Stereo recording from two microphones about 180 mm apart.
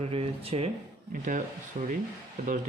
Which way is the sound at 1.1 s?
45° right (ahead or behind).